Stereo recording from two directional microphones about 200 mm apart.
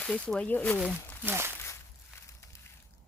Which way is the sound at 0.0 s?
5° left (ahead or behind).